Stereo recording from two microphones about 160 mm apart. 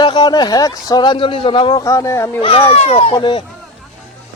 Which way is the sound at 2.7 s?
40° left (ahead or behind).